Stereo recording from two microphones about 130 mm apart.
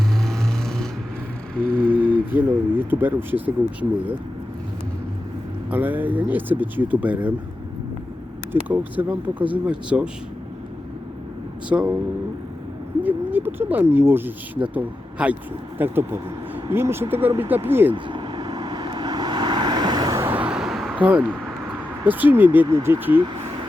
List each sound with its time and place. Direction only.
0.3 s a sound: 5° left (ahead or behind)
1.6 s speech: 15° right (ahead or behind)
5.7 s speech: 15° right (ahead or behind)
8.6 s speech: 15° right (ahead or behind)
11.7 s speech: 10° right (ahead or behind)
13.0 s speech: 15° right (ahead or behind)
17.9 s vehicle: 35° right (ahead or behind)
20.2 s vehicle: 10° right (ahead or behind)
20.9 s speech: 15° right (ahead or behind)